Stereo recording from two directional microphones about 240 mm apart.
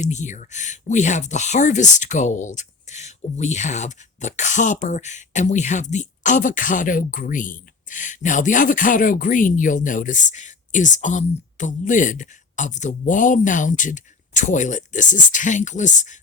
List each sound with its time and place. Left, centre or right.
0.0 s speech: left